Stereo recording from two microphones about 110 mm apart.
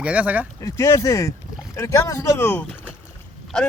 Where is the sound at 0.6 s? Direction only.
25° left (ahead or behind).